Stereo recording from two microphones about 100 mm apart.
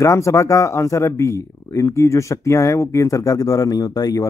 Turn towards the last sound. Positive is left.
turn(degrees=40)  # may be behind; listen again after turning